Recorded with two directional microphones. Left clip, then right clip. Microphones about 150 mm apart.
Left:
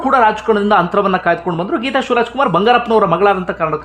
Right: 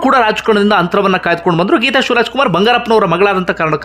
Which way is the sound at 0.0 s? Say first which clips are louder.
Right 1 dB; 30° right (ahead or behind).